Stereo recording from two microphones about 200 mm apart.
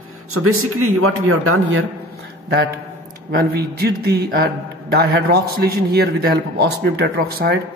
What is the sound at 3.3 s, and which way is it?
A man's voice, 50° right (ahead or behind).